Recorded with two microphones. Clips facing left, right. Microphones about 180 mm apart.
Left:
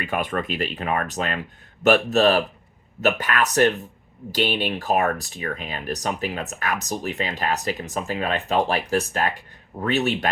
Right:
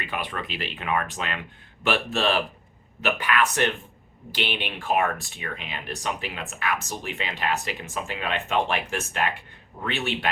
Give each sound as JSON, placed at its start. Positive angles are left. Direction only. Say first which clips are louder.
{"t": 0.0, "sound": "speech", "louder": "left 6 dB", "side_deg": 45}